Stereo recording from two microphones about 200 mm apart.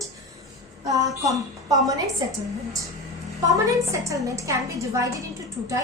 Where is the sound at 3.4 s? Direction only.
15° right (ahead or behind).